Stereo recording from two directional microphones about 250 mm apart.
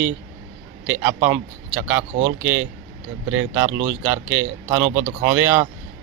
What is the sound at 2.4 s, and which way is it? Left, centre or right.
Speech, right.